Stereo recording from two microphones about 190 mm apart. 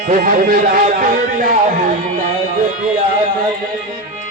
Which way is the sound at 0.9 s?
45° right (ahead or behind).